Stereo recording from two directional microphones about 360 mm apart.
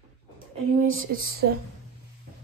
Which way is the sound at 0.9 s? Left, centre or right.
Right.